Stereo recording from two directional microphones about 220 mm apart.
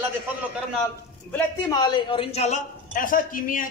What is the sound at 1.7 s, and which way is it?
A man's voice, 20° left (ahead or behind).